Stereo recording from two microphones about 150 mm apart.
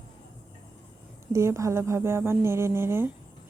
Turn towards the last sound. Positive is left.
turn(degrees=-15)  # may be behind; listen again after turning